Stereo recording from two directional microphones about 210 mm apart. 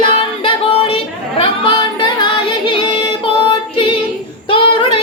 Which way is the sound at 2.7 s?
25° left (ahead or behind).